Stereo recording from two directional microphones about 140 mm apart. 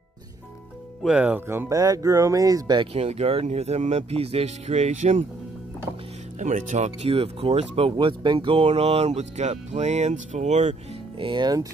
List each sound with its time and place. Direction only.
1.0 s speech: 10° right (ahead or behind); by 2.9 s 30° right (ahead or behind)
2.9 s speech: 45° right (ahead or behind)
6.4 s speech: 60° right (ahead or behind)
11.1 s speech: 35° right (ahead or behind)